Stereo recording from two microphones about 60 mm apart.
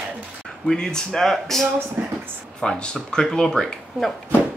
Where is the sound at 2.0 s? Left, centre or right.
Right.